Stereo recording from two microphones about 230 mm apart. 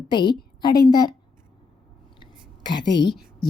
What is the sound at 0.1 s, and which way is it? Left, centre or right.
A woman's voice, centre.